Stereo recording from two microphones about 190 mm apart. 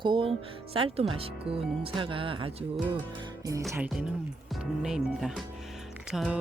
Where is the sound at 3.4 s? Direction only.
15° right (ahead or behind).